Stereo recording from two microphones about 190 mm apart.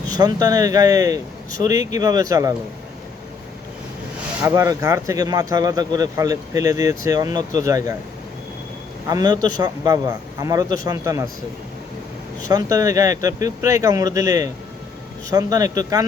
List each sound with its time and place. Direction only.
0.2 s a man's voice: 20° right (ahead or behind)
4.4 s speech: 15° right (ahead or behind)
9.0 s a man's voice: 20° right (ahead or behind)
12.5 s a man's voice: 15° right (ahead or behind)